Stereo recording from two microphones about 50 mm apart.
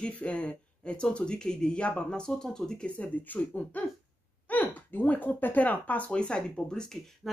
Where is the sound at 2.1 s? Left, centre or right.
Centre.